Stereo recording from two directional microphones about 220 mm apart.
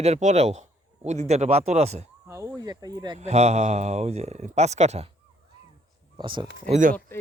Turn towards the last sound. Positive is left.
turn(degrees=-40)  # may be behind; listen again after turning